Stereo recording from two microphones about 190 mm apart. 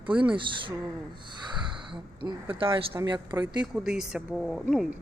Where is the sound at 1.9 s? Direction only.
25° right (ahead or behind).